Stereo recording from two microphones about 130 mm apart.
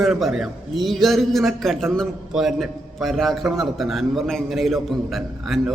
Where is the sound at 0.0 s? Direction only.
Centre (ahead or behind).